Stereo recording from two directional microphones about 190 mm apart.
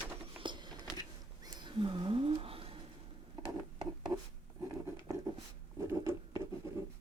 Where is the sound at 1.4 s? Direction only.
25° right (ahead or behind).